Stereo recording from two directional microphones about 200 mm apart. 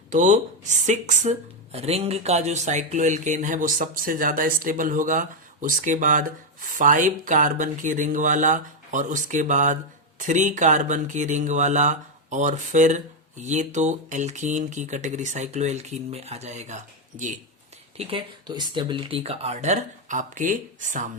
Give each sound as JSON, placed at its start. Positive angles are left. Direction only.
{"t": 0.1, "sound": "speech", "side_deg": -40}